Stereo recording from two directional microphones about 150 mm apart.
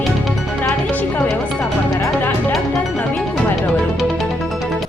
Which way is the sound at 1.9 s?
20° left (ahead or behind).